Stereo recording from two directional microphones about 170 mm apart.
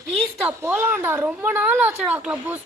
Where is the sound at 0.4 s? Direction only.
10° right (ahead or behind).